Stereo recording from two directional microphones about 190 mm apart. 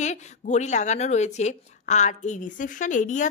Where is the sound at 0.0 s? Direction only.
40° left (ahead or behind).